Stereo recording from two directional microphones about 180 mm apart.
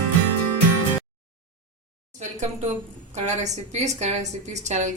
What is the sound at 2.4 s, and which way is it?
Speech, 40° right (ahead or behind).